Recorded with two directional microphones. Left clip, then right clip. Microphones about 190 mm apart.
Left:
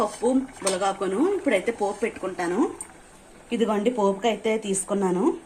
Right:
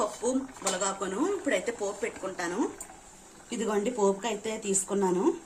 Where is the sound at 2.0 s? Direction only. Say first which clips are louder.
Left 6 dB; 25° left (ahead or behind).